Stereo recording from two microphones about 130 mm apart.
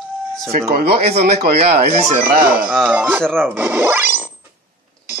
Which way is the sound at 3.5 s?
15° right (ahead or behind).